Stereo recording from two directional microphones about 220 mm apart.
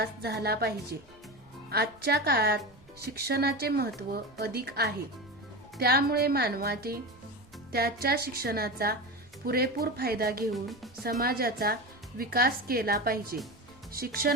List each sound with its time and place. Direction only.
0.0 s a woman's voice: 45° right (ahead or behind)
10.5 s speech: centre (ahead or behind)
11.0 s a woman's voice: 45° right (ahead or behind)